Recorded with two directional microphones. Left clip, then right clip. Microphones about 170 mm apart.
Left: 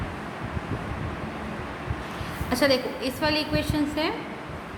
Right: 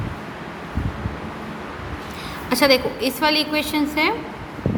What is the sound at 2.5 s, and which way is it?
A woman's voice, 55° right (ahead or behind).